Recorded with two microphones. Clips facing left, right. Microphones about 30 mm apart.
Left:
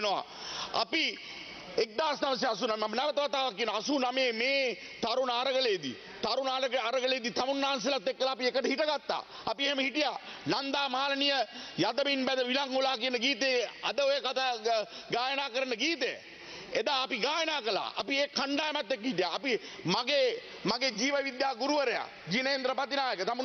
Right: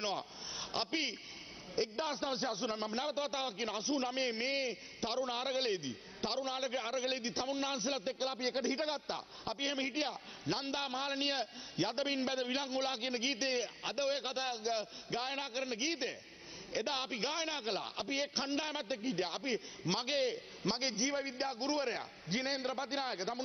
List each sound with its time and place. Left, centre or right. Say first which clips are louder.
0.6 s a man's voice: left 6 dB; left